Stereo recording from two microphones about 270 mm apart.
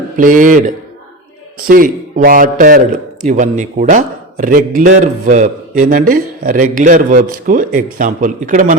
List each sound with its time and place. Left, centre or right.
0.2 s a man's voice: right